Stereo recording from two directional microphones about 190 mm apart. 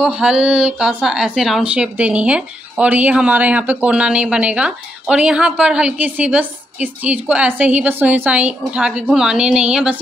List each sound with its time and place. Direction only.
0.0 s speech: 5° right (ahead or behind)